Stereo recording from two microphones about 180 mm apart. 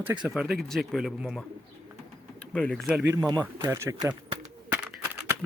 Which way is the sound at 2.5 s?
5° left (ahead or behind).